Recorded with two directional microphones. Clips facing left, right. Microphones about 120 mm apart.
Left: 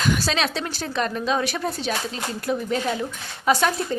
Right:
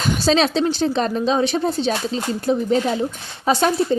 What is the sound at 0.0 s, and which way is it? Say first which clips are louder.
Speech: right 5 dB; 30° right (ahead or behind).